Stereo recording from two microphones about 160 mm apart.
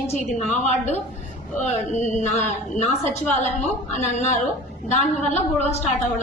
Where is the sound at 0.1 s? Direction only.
45° left (ahead or behind).